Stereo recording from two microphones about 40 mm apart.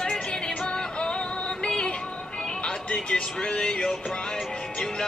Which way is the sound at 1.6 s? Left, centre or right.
Left.